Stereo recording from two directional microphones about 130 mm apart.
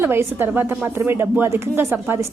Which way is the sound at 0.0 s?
15° right (ahead or behind).